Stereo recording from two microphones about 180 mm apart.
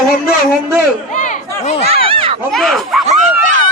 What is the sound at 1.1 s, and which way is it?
Crowd, 45° left (ahead or behind).